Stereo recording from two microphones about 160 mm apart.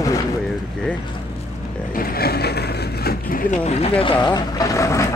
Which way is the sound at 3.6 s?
40° left (ahead or behind).